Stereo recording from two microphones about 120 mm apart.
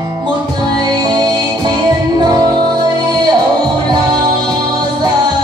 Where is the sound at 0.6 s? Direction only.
35° right (ahead or behind).